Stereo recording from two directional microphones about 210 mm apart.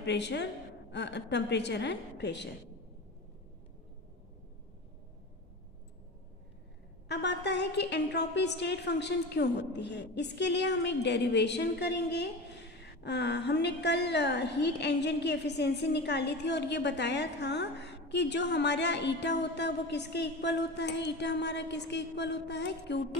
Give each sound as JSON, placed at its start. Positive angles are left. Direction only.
{"t": 0.0, "sound": "a woman's voice", "side_deg": 55}
{"t": 7.1, "sound": "a woman's voice", "side_deg": 55}